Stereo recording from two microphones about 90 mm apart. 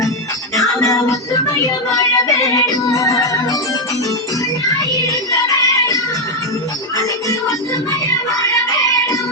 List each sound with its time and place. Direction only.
0.7 s music: 35° left (ahead or behind)
4.9 s music: 40° left (ahead or behind)